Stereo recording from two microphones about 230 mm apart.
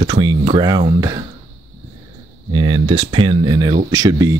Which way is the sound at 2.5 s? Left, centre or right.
Right.